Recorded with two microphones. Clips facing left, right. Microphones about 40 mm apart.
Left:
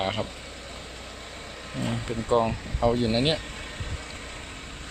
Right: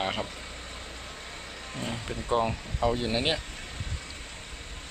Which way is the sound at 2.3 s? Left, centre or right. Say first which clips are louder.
Left 4 dB; centre.